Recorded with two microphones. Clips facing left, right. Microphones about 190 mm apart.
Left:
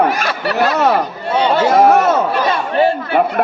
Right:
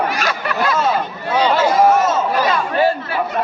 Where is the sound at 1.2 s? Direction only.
30° left (ahead or behind).